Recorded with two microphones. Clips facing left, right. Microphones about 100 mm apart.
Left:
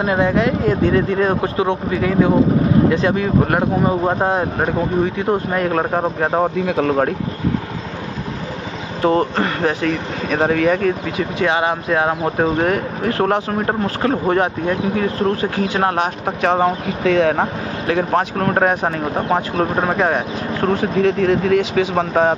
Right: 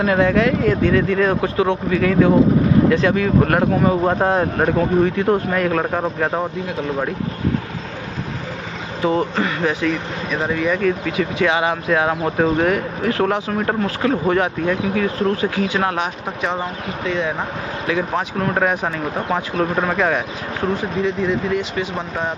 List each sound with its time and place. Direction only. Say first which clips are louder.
0.0 s speech: even; 20° left (ahead or behind)
5.6 s speech: left 1 dB; 30° left (ahead or behind)
6.6 s speech: left 6 dB; 85° left
9.0 s speech: left 3 dB; 50° left (ahead or behind)
11.1 s speech: even; 30° left (ahead or behind)
16.3 s speech: left 9 dB; 60° left (ahead or behind); by 17.4 s 90° left
17.4 s speech: left 4 dB; 50° left (ahead or behind); by 20.2 s 30° left (ahead or behind)
20.7 s speech: left 6 dB; 70° left (ahead or behind)